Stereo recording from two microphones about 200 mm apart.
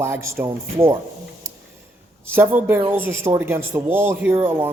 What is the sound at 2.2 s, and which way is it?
Speech, 10° right (ahead or behind).